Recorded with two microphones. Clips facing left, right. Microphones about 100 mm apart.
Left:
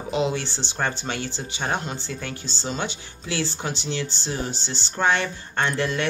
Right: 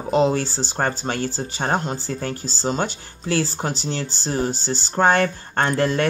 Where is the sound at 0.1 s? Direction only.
40° right (ahead or behind).